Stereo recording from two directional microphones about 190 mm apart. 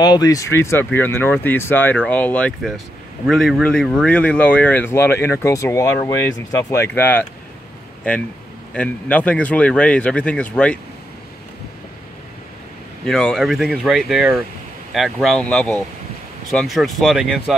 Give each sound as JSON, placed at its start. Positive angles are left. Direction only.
{"t": 0.0, "sound": "speech", "side_deg": 20}
{"t": 13.0, "sound": "speech", "side_deg": 5}